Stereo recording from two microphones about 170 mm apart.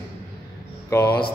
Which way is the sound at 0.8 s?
10° left (ahead or behind).